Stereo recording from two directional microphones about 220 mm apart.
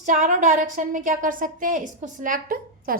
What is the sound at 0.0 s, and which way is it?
A woman's voice, 35° right (ahead or behind).